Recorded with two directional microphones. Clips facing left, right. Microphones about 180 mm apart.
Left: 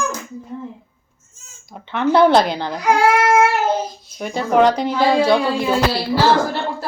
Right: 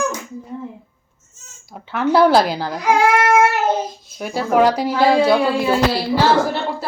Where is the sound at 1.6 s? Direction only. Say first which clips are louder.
Left 1 dB; 5° right (ahead or behind).